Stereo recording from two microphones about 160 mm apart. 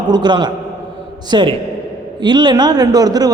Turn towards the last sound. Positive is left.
turn(degrees=-25)  # may be behind; listen again after turning